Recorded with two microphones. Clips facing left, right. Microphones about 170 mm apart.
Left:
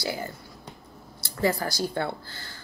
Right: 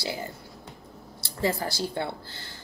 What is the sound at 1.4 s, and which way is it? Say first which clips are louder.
A woman's voice: left 2 dB; 25° right (ahead or behind).